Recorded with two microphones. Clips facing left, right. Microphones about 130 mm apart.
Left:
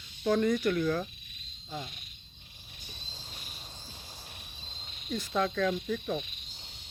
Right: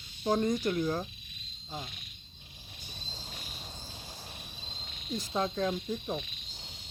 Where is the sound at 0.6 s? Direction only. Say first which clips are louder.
Left 2 dB; 25° right (ahead or behind).